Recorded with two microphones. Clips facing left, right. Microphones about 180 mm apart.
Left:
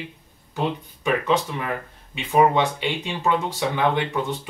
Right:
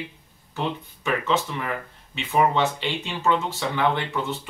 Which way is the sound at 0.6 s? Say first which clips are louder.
Left 3 dB; 15° left (ahead or behind).